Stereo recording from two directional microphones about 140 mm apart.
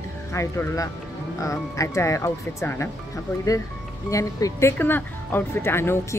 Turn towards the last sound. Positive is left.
turn(degrees=15)  # may be behind; listen again after turning